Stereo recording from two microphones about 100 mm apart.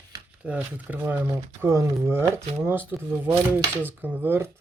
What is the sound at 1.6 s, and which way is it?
Speech, 30° right (ahead or behind).